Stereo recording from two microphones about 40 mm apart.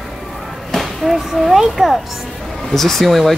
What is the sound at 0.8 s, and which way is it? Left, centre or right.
Speech, centre.